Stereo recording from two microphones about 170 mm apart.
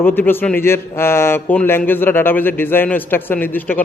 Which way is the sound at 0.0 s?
10° left (ahead or behind).